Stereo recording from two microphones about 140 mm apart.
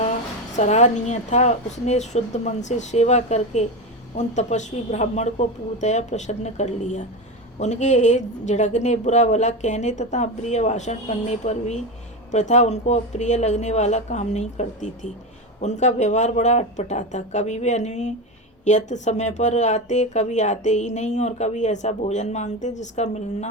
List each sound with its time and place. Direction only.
0.5 s speech: 55° left (ahead or behind)